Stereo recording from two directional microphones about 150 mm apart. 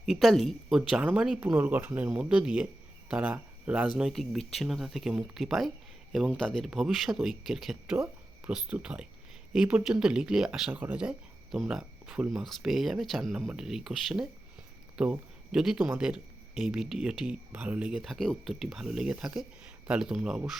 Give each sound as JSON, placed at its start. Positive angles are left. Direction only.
{"t": 0.0, "sound": "speech", "side_deg": 0}